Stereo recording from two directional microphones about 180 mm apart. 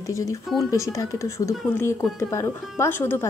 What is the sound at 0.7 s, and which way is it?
A woman's voice, 15° left (ahead or behind).